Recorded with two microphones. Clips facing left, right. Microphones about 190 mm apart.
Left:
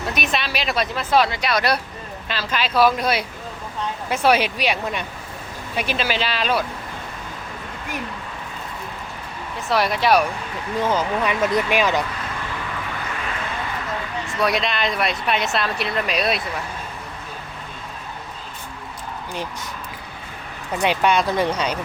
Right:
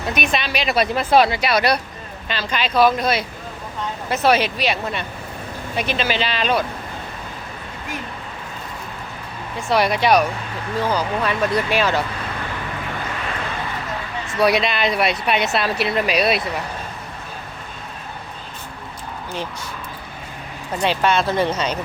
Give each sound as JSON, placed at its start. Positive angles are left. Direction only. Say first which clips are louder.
{"t": 0.1, "sound": "speech", "louder": "right 3 dB", "side_deg": 0}
{"t": 0.9, "sound": "speech", "louder": "right 3 dB", "side_deg": -15}
{"t": 9.6, "sound": "speech", "louder": "right 2 dB", "side_deg": 0}
{"t": 10.8, "sound": "speech", "louder": "even", "side_deg": 20}
{"t": 14.3, "sound": "speech", "louder": "right 4 dB", "side_deg": -5}
{"t": 20.8, "sound": "speech", "louder": "even", "side_deg": 15}